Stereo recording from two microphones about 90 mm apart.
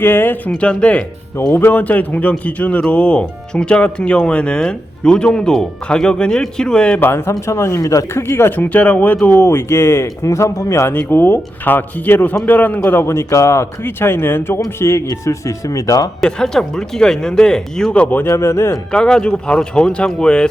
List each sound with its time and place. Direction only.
0.0 s speech: 25° left (ahead or behind)
0.5 s speech: 10° left (ahead or behind)
7.0 s speech: 25° left (ahead or behind); by 16.0 s 40° left (ahead or behind)
16.2 s speech: 5° left (ahead or behind)
18.3 s speech: 35° left (ahead or behind)
18.9 s speech: 10° left (ahead or behind)